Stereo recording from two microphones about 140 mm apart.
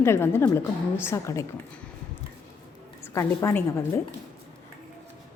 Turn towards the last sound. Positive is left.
turn(degrees=20)  # may be behind; listen again after turning